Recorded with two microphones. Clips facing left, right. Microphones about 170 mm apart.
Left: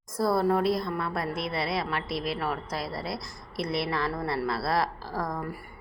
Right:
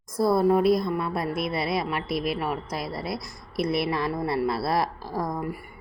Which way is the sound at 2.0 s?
25° left (ahead or behind).